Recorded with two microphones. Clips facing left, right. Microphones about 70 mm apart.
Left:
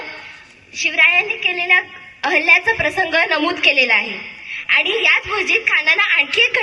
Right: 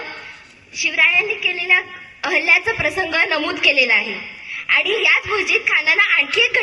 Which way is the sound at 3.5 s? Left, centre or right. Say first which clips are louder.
Left 1 dB; centre.